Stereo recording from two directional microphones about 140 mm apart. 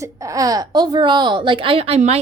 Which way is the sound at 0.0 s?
25° right (ahead or behind).